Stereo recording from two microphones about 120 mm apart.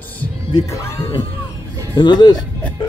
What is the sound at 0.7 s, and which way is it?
Speech, 25° left (ahead or behind).